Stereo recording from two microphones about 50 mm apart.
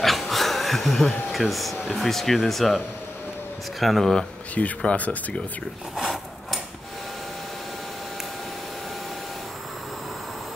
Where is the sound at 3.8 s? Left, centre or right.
Centre.